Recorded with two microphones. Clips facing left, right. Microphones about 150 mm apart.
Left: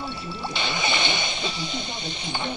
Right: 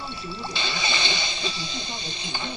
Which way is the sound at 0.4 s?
20° left (ahead or behind).